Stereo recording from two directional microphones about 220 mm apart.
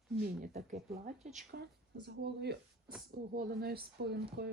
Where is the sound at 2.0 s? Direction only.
50° right (ahead or behind).